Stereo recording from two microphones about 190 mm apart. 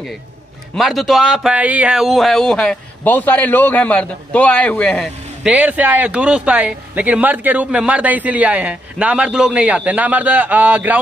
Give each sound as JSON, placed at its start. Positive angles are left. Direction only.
{"t": 0.7, "sound": "speech", "side_deg": 0}